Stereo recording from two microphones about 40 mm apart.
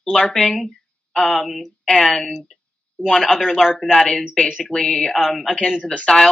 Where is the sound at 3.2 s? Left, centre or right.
Centre.